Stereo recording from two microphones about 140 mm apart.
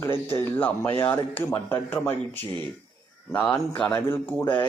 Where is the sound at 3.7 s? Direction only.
15° left (ahead or behind).